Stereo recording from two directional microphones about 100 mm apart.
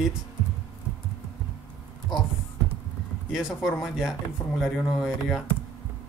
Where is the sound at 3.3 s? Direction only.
5° right (ahead or behind).